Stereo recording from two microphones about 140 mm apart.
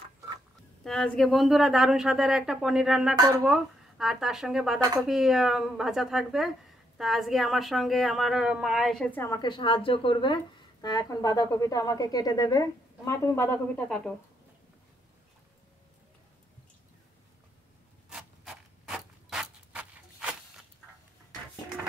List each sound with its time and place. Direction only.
0.8 s a woman's voice: 5° left (ahead or behind)
9.4 s a woman's voice: 35° left (ahead or behind); by 14.1 s 5° left (ahead or behind)
18.1 s a sound: 5° right (ahead or behind)